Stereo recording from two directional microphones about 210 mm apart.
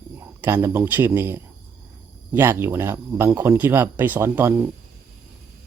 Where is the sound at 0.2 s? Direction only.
10° right (ahead or behind).